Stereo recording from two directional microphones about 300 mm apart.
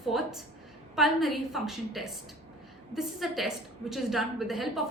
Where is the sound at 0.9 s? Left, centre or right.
Centre.